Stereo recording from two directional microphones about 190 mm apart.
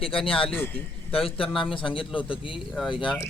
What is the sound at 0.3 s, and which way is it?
Speech, 30° left (ahead or behind).